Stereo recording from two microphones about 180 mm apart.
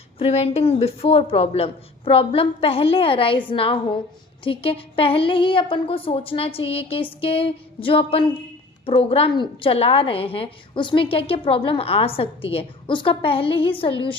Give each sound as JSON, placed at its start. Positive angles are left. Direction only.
{"t": 0.2, "sound": "a woman's voice", "side_deg": 35}